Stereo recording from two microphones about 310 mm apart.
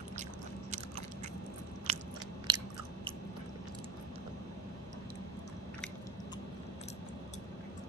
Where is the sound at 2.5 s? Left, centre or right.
Centre.